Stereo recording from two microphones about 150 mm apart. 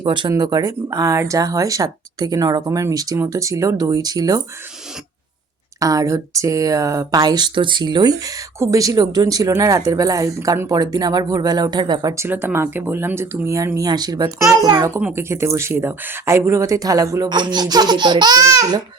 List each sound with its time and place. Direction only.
0.0 s speech: 30° right (ahead or behind)
5.8 s speech: 20° right (ahead or behind)
12.1 s speech: 15° right (ahead or behind)